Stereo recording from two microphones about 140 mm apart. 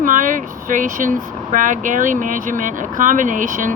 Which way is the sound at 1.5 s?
70° right (ahead or behind).